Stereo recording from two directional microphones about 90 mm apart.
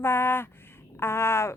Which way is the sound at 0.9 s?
30° left (ahead or behind).